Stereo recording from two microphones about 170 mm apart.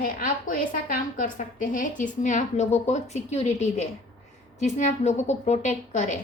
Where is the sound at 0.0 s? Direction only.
50° left (ahead or behind).